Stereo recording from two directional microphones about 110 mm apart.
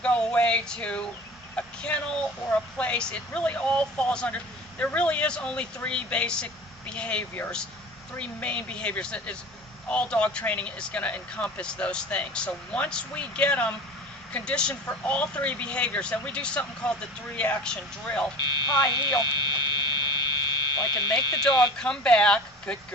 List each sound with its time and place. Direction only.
0.0 s speech: 10° left (ahead or behind)
18.3 s speech: 40° left (ahead or behind)
20.1 s fire alarm: 40° left (ahead or behind)
21.8 s speech: 5° left (ahead or behind)